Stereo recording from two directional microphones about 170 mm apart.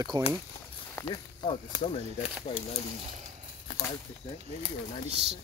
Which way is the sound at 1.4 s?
30° left (ahead or behind).